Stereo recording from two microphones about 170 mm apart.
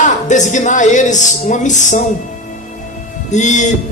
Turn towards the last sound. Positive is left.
turn(degrees=45)  # may be behind; listen again after turning